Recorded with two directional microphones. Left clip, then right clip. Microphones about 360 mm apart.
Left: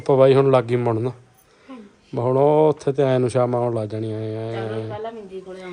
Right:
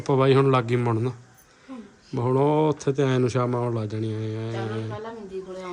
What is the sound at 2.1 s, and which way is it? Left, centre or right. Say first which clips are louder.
A man's voice: left 5 dB; centre.